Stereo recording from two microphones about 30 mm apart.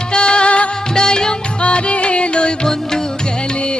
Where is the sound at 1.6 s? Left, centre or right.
Left.